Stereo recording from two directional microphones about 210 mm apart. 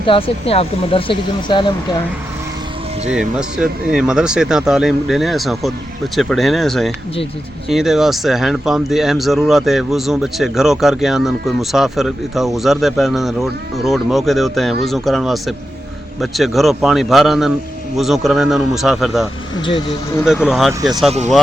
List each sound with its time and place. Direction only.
0.0 s speech: 25° left (ahead or behind)
3.1 s speech: 5° right (ahead or behind)
20.2 s speech: 5° right (ahead or behind)